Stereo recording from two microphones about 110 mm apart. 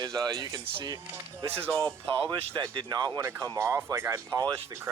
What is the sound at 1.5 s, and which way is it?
Speech, 20° right (ahead or behind).